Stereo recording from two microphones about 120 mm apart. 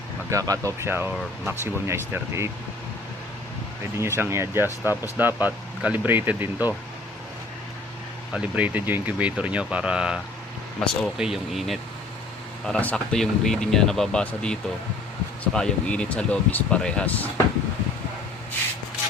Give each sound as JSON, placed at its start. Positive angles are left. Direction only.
{"t": 0.3, "sound": "speech", "side_deg": -30}
{"t": 3.9, "sound": "speech", "side_deg": -20}
{"t": 8.3, "sound": "speech", "side_deg": -10}
{"t": 12.6, "sound": "speech", "side_deg": 10}